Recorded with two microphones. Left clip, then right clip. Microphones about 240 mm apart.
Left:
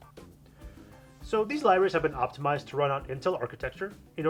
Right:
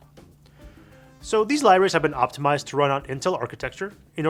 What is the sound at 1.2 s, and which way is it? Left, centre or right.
Speech, right.